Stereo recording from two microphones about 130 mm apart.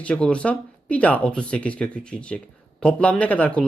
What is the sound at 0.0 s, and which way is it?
Speech, 10° left (ahead or behind).